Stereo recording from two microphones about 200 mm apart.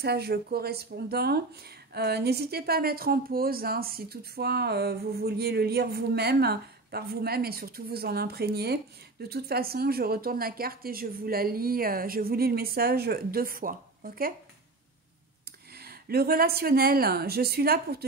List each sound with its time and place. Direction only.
0.0 s speech: 55° right (ahead or behind)
15.7 s speech: 50° right (ahead or behind)